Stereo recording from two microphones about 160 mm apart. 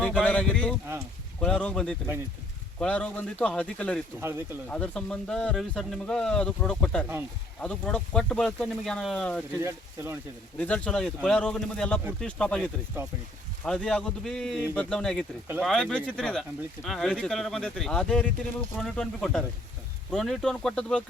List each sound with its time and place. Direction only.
0.0 s speech: 10° left (ahead or behind)
4.2 s speech: 15° right (ahead or behind)
4.7 s speech: 5° left (ahead or behind)
9.6 s speech: 15° right (ahead or behind)
10.6 s speech: 10° left (ahead or behind)